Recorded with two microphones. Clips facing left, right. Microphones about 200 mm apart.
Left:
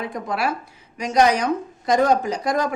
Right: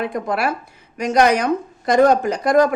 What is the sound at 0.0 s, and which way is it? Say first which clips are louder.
Speech: right 4 dB; 55° right (ahead or behind).